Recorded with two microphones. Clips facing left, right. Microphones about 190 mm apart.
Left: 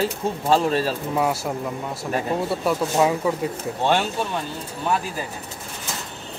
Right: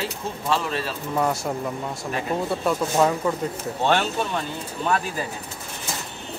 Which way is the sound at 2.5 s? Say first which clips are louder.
Even; 5° left (ahead or behind).